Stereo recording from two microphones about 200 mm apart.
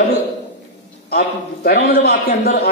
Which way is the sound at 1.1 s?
50° left (ahead or behind).